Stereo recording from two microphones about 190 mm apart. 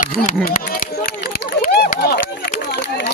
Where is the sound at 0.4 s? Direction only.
50° left (ahead or behind).